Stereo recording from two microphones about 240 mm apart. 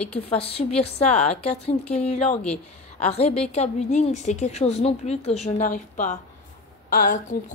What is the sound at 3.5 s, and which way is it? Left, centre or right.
A woman's voice, left.